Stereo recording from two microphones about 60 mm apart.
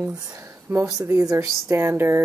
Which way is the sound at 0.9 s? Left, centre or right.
Right.